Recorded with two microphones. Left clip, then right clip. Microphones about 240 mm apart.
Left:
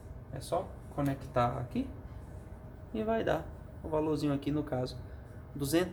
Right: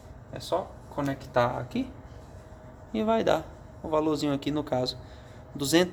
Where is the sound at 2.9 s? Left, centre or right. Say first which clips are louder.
Right 7 dB; right.